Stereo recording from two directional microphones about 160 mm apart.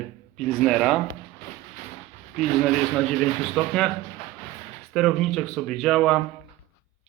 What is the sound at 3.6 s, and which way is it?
Speech, centre (ahead or behind).